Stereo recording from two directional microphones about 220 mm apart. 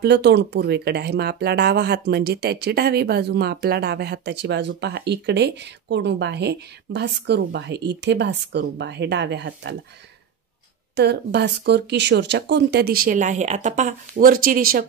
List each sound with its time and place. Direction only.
0.0 s speech: 50° right (ahead or behind)
11.0 s speech: 50° right (ahead or behind)